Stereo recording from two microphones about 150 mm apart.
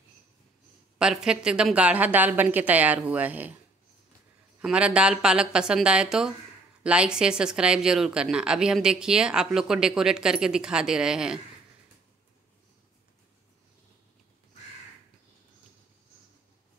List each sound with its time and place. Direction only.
0.9 s a woman's voice: 5° right (ahead or behind)
4.6 s speech: 5° right (ahead or behind)